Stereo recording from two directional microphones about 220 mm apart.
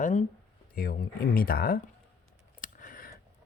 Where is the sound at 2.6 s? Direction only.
40° left (ahead or behind).